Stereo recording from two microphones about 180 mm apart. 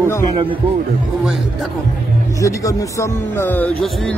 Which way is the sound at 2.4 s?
15° left (ahead or behind).